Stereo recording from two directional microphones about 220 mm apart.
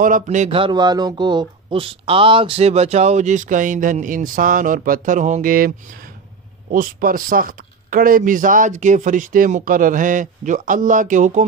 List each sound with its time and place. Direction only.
0.0 s speech: 35° right (ahead or behind)
6.7 s speech: 40° right (ahead or behind)